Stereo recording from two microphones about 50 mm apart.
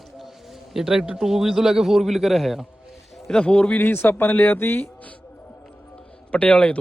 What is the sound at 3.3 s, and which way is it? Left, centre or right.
Speech, left.